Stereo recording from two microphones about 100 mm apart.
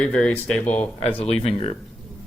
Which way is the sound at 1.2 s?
90° left.